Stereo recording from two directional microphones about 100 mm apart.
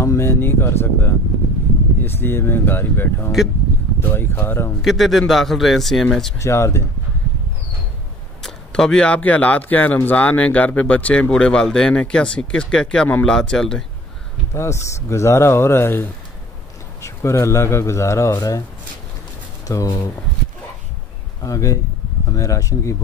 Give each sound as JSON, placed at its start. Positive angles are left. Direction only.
{"t": 0.0, "sound": "a man's voice", "side_deg": 25}
{"t": 4.8, "sound": "speech", "side_deg": 0}
{"t": 6.3, "sound": "a man's voice", "side_deg": 30}
{"t": 8.4, "sound": "speech", "side_deg": 5}
{"t": 14.5, "sound": "a man's voice", "side_deg": 30}
{"t": 19.7, "sound": "speech", "side_deg": 40}
{"t": 21.4, "sound": "speech", "side_deg": 35}